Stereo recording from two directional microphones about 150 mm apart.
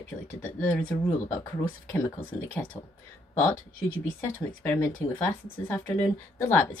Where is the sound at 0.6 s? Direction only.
10° left (ahead or behind).